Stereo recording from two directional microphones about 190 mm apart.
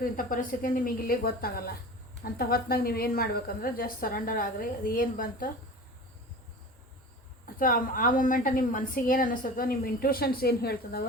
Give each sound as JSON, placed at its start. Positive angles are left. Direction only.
{"t": 0.0, "sound": "a woman's voice", "side_deg": 50}
{"t": 7.4, "sound": "a woman's voice", "side_deg": 50}